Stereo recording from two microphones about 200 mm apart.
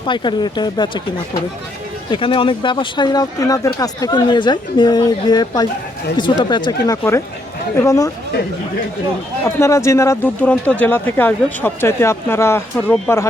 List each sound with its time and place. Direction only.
0.0 s speech: 25° left (ahead or behind)
2.0 s speech: 25° left (ahead or behind)
9.6 s speech: 15° left (ahead or behind)